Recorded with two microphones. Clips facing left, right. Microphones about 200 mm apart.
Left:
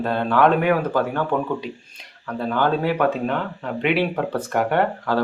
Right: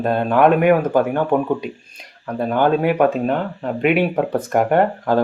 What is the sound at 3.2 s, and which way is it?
Speech, 40° right (ahead or behind).